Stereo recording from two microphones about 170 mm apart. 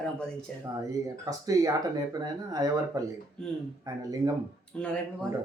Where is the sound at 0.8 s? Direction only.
20° right (ahead or behind).